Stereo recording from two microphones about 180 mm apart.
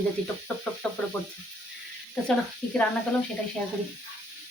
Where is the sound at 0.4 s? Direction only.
5° left (ahead or behind).